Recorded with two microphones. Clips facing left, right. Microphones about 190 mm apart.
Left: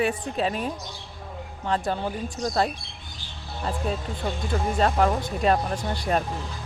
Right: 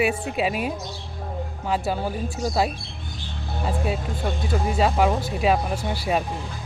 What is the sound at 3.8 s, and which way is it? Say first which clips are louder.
Speech: right 2 dB; 5° right (ahead or behind).